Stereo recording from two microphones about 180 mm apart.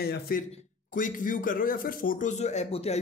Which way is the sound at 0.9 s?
45° left (ahead or behind).